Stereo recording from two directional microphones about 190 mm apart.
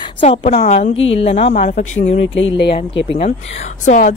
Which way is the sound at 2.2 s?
80° left.